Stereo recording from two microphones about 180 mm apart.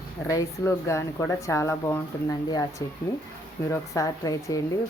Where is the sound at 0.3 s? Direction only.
15° left (ahead or behind).